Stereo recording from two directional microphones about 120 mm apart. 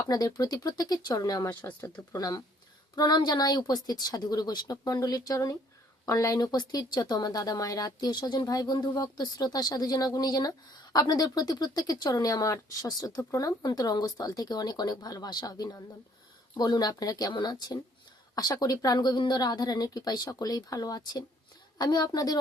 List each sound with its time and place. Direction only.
0.1 s speech: 30° left (ahead or behind)